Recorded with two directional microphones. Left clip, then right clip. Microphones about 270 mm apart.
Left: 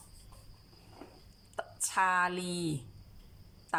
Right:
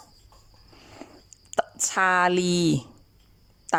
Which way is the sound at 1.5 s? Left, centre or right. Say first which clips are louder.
Right 8 dB; right.